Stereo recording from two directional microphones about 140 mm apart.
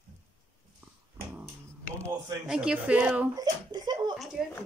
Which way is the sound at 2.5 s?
5° right (ahead or behind).